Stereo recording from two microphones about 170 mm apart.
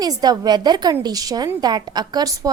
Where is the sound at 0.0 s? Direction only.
25° right (ahead or behind).